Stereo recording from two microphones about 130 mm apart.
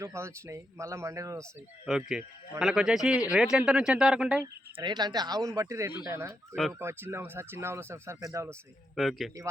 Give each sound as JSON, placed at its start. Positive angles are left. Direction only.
{"t": 0.0, "sound": "speech", "side_deg": -20}
{"t": 1.9, "sound": "speech", "side_deg": -5}
{"t": 4.8, "sound": "speech", "side_deg": -35}
{"t": 9.0, "sound": "speech", "side_deg": 0}